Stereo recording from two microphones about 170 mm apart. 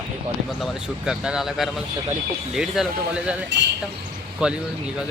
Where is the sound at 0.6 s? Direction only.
5° right (ahead or behind).